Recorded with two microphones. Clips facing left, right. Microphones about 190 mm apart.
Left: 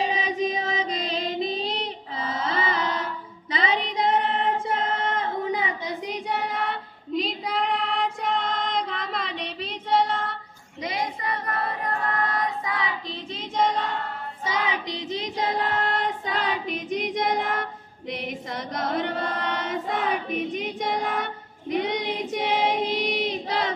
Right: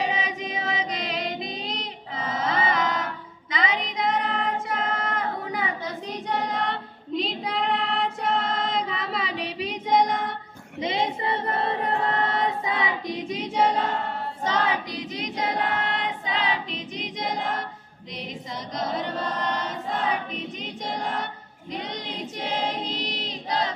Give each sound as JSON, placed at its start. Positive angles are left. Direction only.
{"t": 0.0, "sound": "music", "side_deg": 30}
{"t": 3.5, "sound": "child singing", "side_deg": 30}
{"t": 10.8, "sound": "choir", "side_deg": -25}
{"t": 14.5, "sound": "child singing", "side_deg": 20}
{"t": 15.8, "sound": "child singing", "side_deg": 40}
{"t": 18.8, "sound": "choir", "side_deg": 60}